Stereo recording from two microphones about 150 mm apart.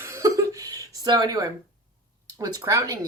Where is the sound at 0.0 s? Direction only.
20° right (ahead or behind).